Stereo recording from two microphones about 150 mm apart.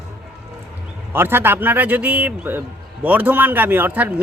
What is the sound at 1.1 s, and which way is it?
A man's voice, 15° right (ahead or behind).